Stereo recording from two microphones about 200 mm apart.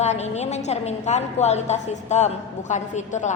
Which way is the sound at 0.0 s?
35° left (ahead or behind).